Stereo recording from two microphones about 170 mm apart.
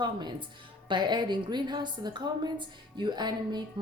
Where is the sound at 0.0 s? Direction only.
25° right (ahead or behind).